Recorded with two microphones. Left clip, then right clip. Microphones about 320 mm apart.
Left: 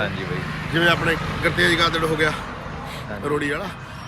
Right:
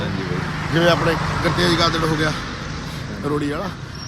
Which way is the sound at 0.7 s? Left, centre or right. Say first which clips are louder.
Right 2 dB; centre.